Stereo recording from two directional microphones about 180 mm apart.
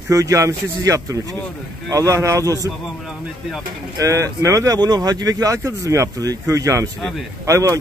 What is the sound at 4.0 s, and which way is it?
Speech, 15° right (ahead or behind).